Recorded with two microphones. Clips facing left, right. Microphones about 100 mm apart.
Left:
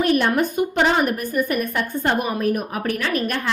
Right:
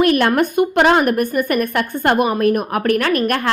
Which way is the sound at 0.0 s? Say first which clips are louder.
Right 4 dB; 75° right (ahead or behind).